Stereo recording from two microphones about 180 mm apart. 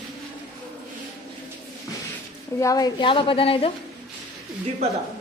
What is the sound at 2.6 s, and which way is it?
A woman's voice, 20° left (ahead or behind).